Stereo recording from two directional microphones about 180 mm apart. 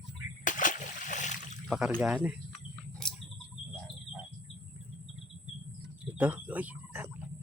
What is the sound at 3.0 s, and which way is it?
Bird, 5° left (ahead or behind).